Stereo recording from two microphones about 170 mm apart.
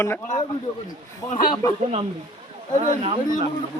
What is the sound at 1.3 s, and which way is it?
Speech, 55° left (ahead or behind).